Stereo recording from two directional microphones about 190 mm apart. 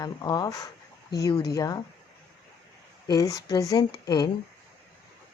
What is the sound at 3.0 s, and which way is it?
Speech, 20° left (ahead or behind).